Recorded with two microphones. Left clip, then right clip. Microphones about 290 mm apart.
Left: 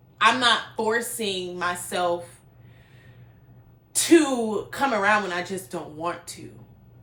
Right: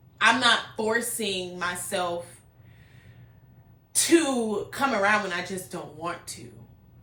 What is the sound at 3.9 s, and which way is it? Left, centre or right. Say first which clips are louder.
Speech: left 3 dB; centre.